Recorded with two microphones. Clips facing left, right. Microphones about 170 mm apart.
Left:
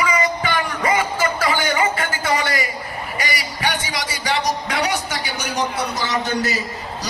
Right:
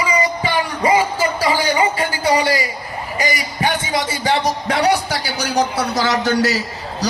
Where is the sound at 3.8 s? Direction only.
25° right (ahead or behind).